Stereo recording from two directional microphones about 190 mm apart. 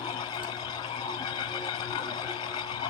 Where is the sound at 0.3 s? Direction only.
25° left (ahead or behind).